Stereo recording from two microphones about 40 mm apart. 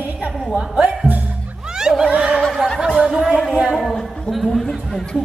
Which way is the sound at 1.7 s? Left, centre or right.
Centre.